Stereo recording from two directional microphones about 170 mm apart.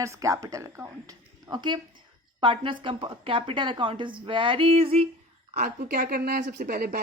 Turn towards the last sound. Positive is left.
turn(degrees=-60)  # may be behind; listen again after turning